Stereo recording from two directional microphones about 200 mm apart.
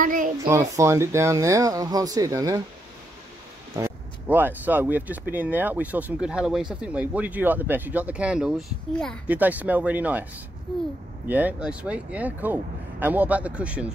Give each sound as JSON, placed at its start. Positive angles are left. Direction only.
{"t": 0.0, "sound": "a sound", "side_deg": -45}
{"t": 0.5, "sound": "speech", "side_deg": -15}
{"t": 3.7, "sound": "speech", "side_deg": -10}
{"t": 9.3, "sound": "speech", "side_deg": -10}
{"t": 10.7, "sound": "a child's voice", "side_deg": 5}
{"t": 11.2, "sound": "speech", "side_deg": -10}